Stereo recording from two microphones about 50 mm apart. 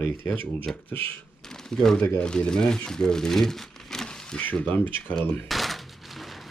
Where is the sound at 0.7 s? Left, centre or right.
Left.